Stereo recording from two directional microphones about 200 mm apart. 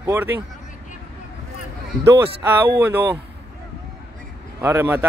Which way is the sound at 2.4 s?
15° right (ahead or behind).